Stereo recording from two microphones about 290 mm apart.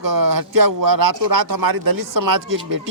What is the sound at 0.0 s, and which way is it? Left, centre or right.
A man's voice, right.